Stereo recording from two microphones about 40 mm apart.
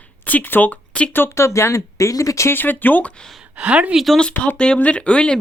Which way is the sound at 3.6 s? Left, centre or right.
Right.